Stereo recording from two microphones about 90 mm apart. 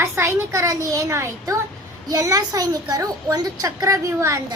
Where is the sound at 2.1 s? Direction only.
45° right (ahead or behind).